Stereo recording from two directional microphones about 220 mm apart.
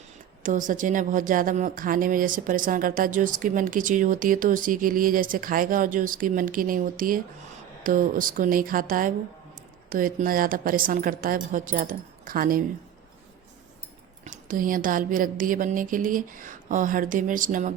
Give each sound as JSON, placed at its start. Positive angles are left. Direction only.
{"t": 0.4, "sound": "speech", "side_deg": -35}
{"t": 14.3, "sound": "speech", "side_deg": -35}